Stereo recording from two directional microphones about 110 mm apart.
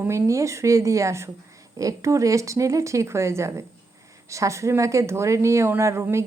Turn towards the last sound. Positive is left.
turn(degrees=-25)  # may be behind; listen again after turning